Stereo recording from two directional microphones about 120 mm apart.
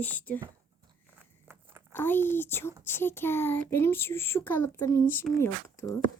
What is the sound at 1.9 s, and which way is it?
A woman's voice, 15° left (ahead or behind).